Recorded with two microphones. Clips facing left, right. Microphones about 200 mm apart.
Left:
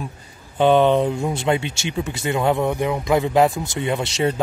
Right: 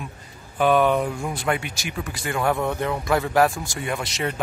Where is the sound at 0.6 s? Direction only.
25° left (ahead or behind).